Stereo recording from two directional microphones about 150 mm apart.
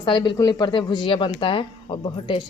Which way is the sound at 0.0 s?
30° left (ahead or behind).